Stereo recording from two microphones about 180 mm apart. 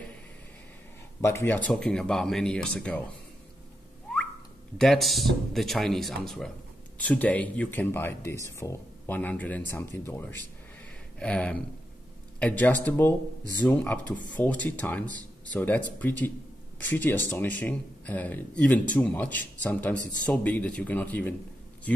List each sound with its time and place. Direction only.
1.2 s speech: 15° left (ahead or behind)
4.7 s speech: centre (ahead or behind)